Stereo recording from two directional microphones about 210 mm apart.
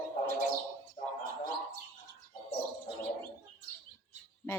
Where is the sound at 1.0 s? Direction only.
30° left (ahead or behind).